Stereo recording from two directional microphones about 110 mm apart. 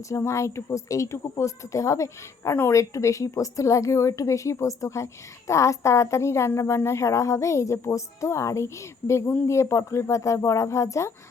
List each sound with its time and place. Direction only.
0.1 s a woman's voice: 25° left (ahead or behind)